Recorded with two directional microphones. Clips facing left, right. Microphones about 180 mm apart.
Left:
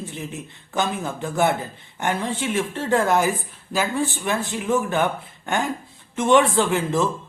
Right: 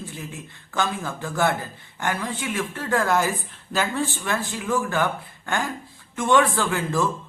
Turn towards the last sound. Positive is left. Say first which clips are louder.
# left 3 dB
turn(degrees=20)  # may be behind; listen again after turning